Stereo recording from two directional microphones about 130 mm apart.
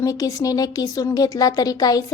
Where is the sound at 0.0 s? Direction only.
25° left (ahead or behind).